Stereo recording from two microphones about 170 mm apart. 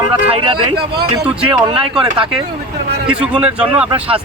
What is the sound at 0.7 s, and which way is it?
Speech, 70° right (ahead or behind).